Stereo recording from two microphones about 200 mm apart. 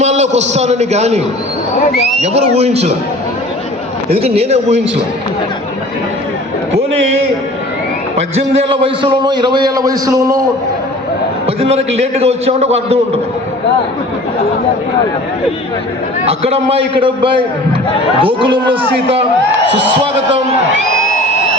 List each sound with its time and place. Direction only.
0.0 s a man's voice: 35° right (ahead or behind)
2.2 s a man's voice: 30° right (ahead or behind)
4.1 s a man's voice: 30° right (ahead or behind)
8.7 s a man's voice: 25° right (ahead or behind)
11.4 s a man's voice: 30° right (ahead or behind)
16.2 s a man's voice: 30° right (ahead or behind)